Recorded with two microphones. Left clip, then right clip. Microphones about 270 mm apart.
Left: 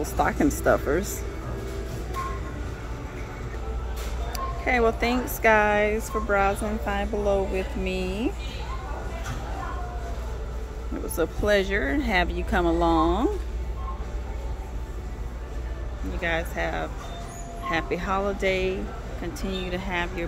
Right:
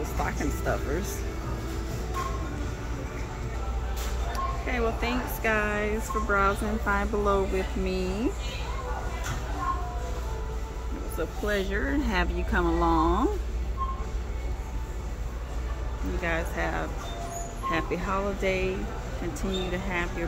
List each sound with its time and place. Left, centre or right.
0.2 s speech: left
4.3 s a woman's voice: centre
11.1 s a woman's voice: centre
16.2 s speech: centre